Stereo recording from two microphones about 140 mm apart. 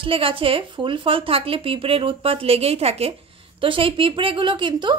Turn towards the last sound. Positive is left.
turn(degrees=-35)  # may be behind; listen again after turning